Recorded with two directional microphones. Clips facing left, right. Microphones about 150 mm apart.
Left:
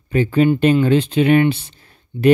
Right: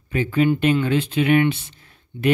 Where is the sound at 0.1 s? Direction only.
35° left (ahead or behind).